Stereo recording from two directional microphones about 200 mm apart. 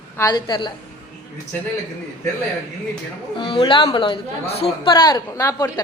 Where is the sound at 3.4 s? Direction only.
25° left (ahead or behind).